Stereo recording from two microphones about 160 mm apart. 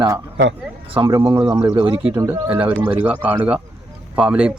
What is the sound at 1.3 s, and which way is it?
Speech, 20° right (ahead or behind).